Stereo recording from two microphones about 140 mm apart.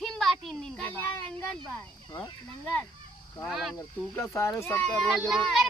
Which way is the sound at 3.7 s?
20° left (ahead or behind).